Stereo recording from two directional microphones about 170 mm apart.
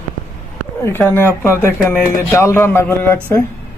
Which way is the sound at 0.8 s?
15° left (ahead or behind).